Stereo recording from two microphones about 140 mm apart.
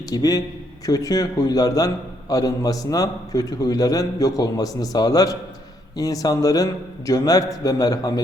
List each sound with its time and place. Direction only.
0.1 s a man's voice: 25° left (ahead or behind)